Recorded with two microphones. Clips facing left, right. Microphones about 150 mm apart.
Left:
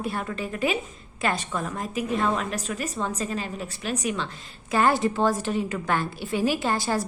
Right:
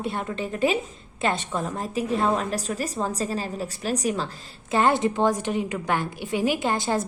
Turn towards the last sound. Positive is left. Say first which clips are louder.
# right 1 dB
turn(degrees=-20)  # may be behind; listen again after turning